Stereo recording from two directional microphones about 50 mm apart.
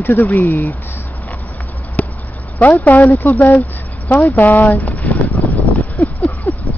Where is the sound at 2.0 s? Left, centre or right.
Left.